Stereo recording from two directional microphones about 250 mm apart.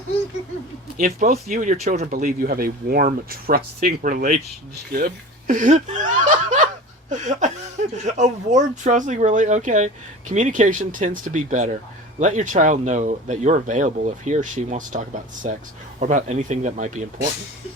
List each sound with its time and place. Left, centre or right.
0.9 s speech: right